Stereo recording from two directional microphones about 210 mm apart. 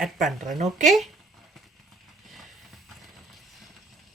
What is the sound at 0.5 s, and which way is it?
Speech, 35° right (ahead or behind).